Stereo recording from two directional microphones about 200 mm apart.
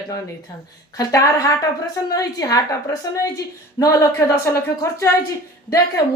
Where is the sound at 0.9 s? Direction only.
15° left (ahead or behind).